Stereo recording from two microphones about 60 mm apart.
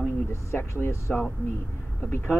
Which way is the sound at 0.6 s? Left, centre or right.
Left.